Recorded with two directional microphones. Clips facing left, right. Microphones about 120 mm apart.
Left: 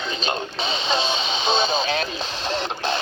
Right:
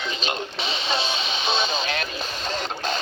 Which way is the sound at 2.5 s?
25° left (ahead or behind).